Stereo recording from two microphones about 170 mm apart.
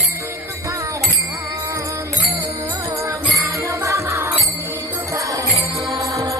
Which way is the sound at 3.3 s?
15° right (ahead or behind).